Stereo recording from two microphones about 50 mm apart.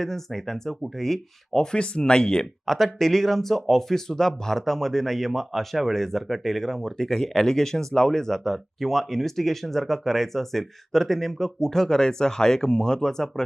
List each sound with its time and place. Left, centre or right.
0.0 s speech: centre
1.7 s speech: centre
2.6 s speech: centre